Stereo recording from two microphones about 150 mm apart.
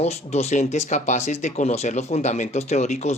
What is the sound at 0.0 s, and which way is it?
Speech, 45° left (ahead or behind).